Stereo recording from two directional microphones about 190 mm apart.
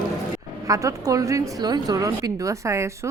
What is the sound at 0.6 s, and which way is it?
A woman's voice, 15° right (ahead or behind).